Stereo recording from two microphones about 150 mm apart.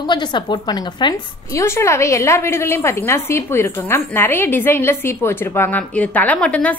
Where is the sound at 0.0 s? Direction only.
30° left (ahead or behind).